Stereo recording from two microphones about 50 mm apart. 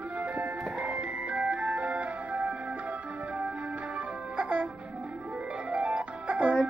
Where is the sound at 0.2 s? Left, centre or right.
Right.